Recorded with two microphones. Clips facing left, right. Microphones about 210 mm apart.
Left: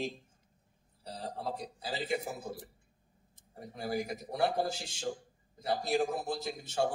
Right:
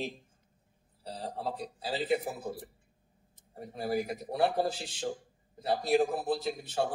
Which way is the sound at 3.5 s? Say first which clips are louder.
Right 3 dB; 35° right (ahead or behind).